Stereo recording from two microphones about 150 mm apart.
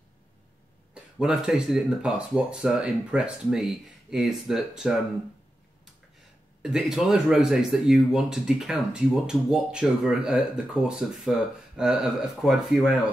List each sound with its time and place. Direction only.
1.1 s speech: 5° right (ahead or behind)
6.6 s speech: 5° right (ahead or behind)